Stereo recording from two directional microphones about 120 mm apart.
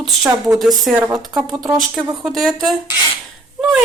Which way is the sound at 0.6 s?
Centre (ahead or behind).